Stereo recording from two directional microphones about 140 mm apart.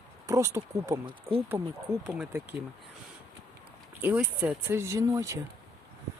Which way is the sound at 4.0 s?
10° right (ahead or behind).